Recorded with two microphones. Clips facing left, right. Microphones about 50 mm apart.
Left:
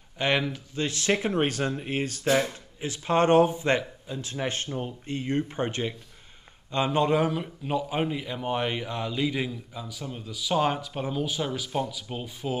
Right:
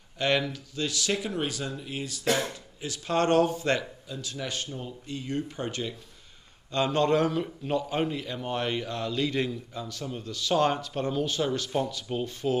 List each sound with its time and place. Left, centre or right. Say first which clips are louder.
0.2 s speech: left 1 dB; left
2.8 s speech: left 3 dB; left
6.7 s a man's voice: even; centre